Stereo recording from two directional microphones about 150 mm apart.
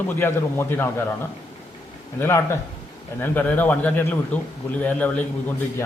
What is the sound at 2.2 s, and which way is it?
A man's voice, 15° left (ahead or behind).